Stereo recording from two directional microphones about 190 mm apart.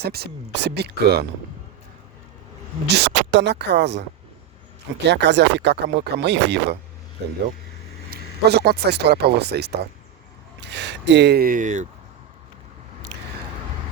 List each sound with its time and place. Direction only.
0.0 s speech: 55° right (ahead or behind)
2.8 s speech: 65° right (ahead or behind)
5.0 s speech: 65° right (ahead or behind)
8.1 s speech: 55° right (ahead or behind); by 11.9 s 40° right (ahead or behind)